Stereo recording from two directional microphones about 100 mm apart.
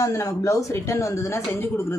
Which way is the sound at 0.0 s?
35° left (ahead or behind).